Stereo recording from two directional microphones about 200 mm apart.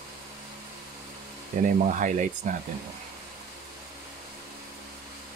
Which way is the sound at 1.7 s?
40° right (ahead or behind).